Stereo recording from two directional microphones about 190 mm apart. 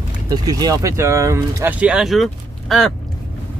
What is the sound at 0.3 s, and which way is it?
Speech, 20° right (ahead or behind).